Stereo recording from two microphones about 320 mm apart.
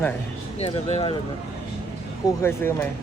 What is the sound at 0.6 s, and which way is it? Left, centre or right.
Speech, centre.